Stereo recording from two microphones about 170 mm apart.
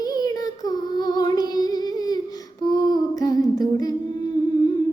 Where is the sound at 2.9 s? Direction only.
20° left (ahead or behind).